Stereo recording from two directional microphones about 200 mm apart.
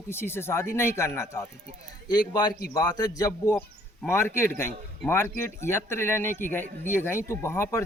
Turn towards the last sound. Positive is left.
turn(degrees=15)  # may be behind; listen again after turning